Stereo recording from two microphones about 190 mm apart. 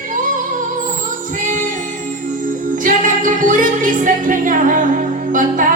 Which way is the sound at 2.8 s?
45° right (ahead or behind).